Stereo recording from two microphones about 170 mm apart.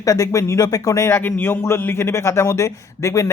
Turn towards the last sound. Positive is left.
turn(degrees=20)  # may be behind; listen again after turning